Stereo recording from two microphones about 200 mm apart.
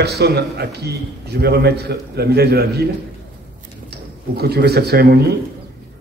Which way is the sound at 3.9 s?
50° right (ahead or behind).